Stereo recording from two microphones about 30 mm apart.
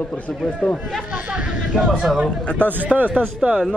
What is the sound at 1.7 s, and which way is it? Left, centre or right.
Speech, left.